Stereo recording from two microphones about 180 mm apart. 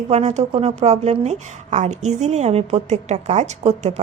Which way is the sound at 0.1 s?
35° right (ahead or behind).